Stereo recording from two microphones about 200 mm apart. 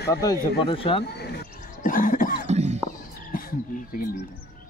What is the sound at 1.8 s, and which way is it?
Cough, 40° left (ahead or behind).